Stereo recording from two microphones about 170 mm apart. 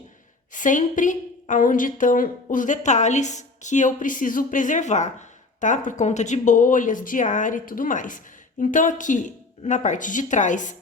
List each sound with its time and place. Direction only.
0.5 s speech: 50° left (ahead or behind)